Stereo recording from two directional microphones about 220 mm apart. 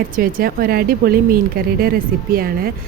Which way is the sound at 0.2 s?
40° right (ahead or behind).